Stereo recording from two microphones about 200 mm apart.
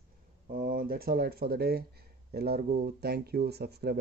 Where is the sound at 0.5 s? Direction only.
45° right (ahead or behind).